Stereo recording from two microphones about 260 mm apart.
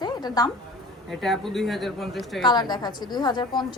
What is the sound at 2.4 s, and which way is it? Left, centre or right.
A woman's voice, centre.